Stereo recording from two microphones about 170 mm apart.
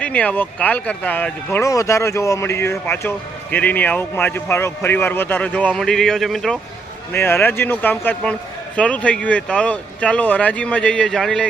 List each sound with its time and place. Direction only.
0.0 s speech: 10° left (ahead or behind)
7.1 s speech: 15° left (ahead or behind)